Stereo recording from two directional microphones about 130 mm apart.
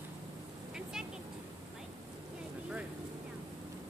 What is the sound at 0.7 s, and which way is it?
Vehicle, 5° right (ahead or behind).